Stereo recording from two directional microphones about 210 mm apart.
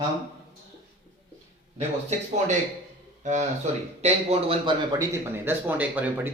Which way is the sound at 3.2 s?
35° right (ahead or behind).